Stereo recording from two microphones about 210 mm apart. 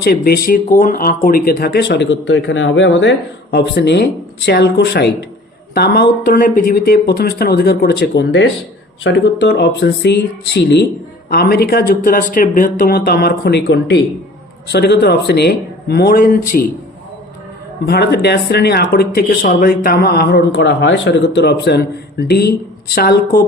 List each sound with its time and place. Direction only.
0.0 s speech: 45° left (ahead or behind)
17.8 s speech: 50° left (ahead or behind)